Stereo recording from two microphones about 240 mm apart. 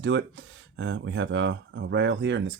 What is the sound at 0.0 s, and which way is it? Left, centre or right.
Speech, right.